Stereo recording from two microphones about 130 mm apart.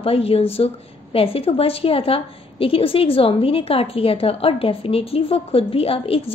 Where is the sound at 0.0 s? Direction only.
50° left (ahead or behind).